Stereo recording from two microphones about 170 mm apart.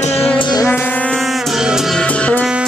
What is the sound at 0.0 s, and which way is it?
Music, 35° left (ahead or behind).